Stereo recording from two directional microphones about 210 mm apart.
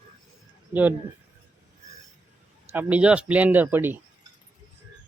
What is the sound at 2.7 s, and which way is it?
Speech, 10° right (ahead or behind).